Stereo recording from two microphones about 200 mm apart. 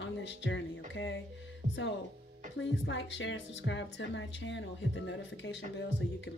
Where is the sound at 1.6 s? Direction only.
35° right (ahead or behind).